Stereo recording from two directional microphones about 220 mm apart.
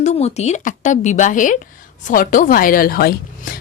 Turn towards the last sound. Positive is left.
turn(degrees=40)  # may be behind; listen again after turning